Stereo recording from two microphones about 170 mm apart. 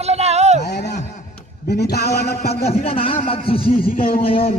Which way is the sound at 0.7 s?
80° left.